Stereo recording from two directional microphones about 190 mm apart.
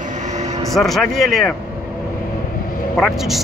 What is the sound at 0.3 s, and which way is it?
Vehicle, 35° right (ahead or behind).